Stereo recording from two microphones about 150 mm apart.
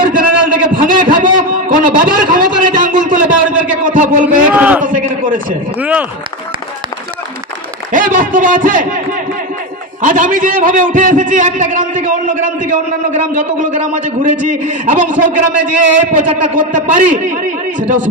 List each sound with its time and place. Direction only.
0.0 s a sound: 65° right (ahead or behind)
0.8 s a man's voice: 65° right (ahead or behind)
1.2 s a sound: 65° right (ahead or behind)
3.6 s a man's voice: 60° right (ahead or behind)
4.5 s speech: 10° right (ahead or behind)
4.8 s a man's voice: 65° right (ahead or behind)
5.8 s speech: 10° right (ahead or behind)
7.9 s a man's voice: 65° right (ahead or behind)